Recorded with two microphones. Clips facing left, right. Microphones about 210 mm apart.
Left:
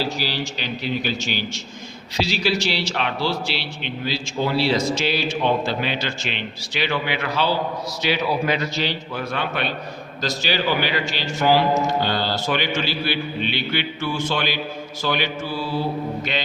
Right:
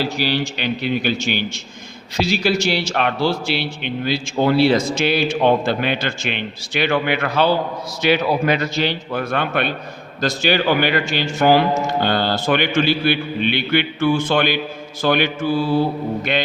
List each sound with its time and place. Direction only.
0.2 s a man's voice: 60° right (ahead or behind)